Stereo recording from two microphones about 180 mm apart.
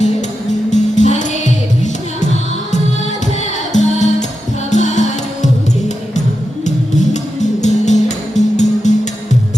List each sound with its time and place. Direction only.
0.7 s music: 40° left (ahead or behind)
3.4 s music: 40° left (ahead or behind)
6.7 s music: 40° left (ahead or behind)